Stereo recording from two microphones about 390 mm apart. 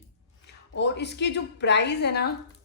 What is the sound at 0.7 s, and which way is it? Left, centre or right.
A woman's voice, left.